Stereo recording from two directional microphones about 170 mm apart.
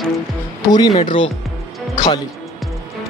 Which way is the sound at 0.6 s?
25° left (ahead or behind).